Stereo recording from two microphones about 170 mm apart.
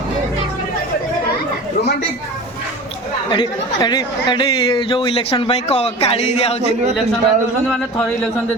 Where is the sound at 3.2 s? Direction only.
30° left (ahead or behind).